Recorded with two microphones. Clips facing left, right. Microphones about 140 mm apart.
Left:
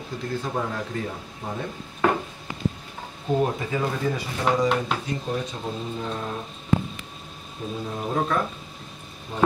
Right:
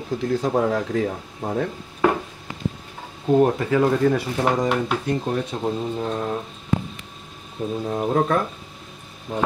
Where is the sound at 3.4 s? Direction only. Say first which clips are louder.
Right 8 dB; 60° right (ahead or behind).